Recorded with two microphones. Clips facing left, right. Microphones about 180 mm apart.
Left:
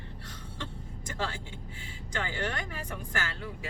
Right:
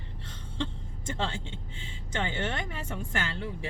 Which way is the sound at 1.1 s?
25° right (ahead or behind).